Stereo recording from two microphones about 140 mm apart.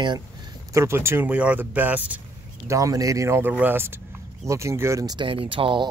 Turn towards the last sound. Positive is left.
turn(degrees=-35)  # may be behind; listen again after turning